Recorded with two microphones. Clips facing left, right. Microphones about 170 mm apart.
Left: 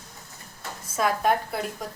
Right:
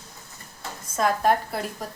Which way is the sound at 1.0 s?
Centre (ahead or behind).